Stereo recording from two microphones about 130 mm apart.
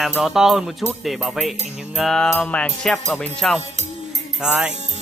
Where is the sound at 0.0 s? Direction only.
5° right (ahead or behind).